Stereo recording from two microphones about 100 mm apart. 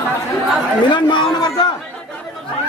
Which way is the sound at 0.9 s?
50° left (ahead or behind).